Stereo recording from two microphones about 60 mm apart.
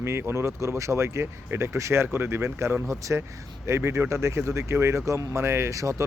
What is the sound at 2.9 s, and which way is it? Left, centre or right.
Speech, right.